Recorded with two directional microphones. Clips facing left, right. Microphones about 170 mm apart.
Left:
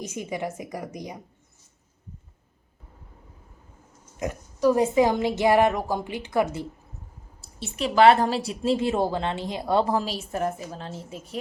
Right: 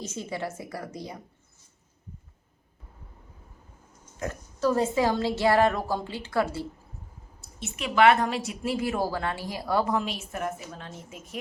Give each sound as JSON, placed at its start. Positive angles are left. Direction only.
{"t": 0.0, "sound": "a woman's voice", "side_deg": 15}
{"t": 4.2, "sound": "a woman's voice", "side_deg": 15}
{"t": 7.6, "sound": "a woman's voice", "side_deg": 30}